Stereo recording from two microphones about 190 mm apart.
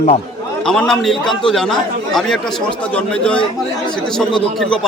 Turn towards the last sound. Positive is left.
turn(degrees=0)  # may be behind; listen again after turning